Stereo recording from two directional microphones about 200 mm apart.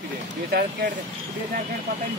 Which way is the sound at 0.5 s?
55° right (ahead or behind).